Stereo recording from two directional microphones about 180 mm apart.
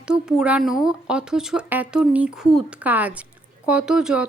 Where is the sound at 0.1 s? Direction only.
5° right (ahead or behind).